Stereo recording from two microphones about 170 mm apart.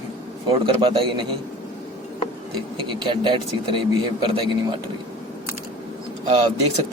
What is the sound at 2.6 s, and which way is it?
Speech, 30° right (ahead or behind).